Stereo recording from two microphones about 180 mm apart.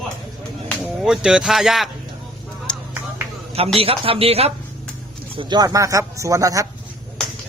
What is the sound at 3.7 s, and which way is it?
A man's voice, 30° right (ahead or behind).